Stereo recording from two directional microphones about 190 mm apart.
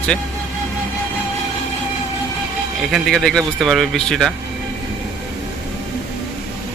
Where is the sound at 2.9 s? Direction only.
Centre (ahead or behind).